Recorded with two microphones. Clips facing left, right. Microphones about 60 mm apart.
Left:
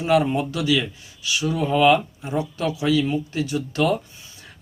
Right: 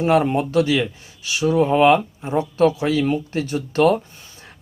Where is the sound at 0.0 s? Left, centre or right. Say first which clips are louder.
Right 2 dB; right.